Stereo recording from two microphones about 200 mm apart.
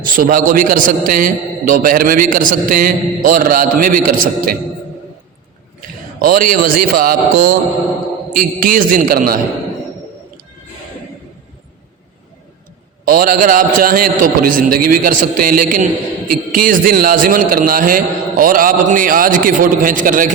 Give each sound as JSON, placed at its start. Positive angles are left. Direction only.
{"t": 0.0, "sound": "a man's voice", "side_deg": -40}
{"t": 6.1, "sound": "a man's voice", "side_deg": -45}
{"t": 13.1, "sound": "a man's voice", "side_deg": -45}